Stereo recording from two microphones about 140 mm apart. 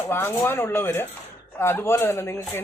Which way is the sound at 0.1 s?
15° left (ahead or behind).